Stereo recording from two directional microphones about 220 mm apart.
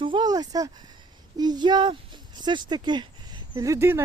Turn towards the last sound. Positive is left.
turn(degrees=-10)  # may be behind; listen again after turning